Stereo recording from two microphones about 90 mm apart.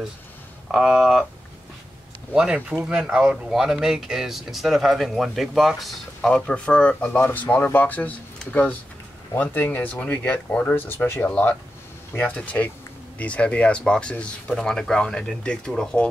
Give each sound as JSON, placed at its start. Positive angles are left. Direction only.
{"t": 0.7, "sound": "speech", "side_deg": -5}
{"t": 2.3, "sound": "speech", "side_deg": -10}
{"t": 7.2, "sound": "speech", "side_deg": 25}